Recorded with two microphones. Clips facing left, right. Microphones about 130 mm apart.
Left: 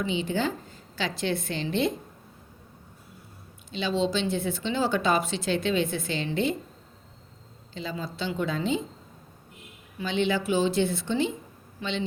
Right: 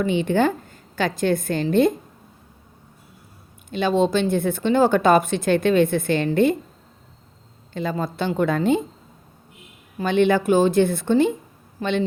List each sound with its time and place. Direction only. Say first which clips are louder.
0.0 s speech: right 8 dB; 55° right (ahead or behind)
3.7 s speech: right 7 dB; 50° right (ahead or behind)
7.7 s speech: right 9 dB; 55° right (ahead or behind)
10.0 s speech: right 8 dB; 55° right (ahead or behind)